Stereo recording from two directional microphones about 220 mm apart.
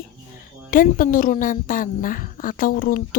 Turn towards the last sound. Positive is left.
turn(degrees=40)  # may be behind; listen again after turning